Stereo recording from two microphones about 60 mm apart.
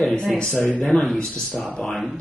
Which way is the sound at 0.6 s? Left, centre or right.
Left.